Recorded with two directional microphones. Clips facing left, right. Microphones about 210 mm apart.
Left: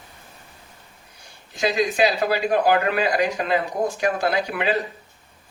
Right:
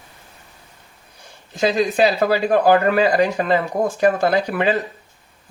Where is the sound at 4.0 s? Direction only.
50° right (ahead or behind).